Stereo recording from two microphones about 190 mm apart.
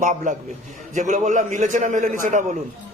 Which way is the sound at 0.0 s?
40° right (ahead or behind).